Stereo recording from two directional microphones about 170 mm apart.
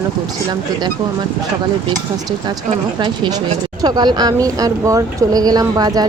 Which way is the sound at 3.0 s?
30° right (ahead or behind).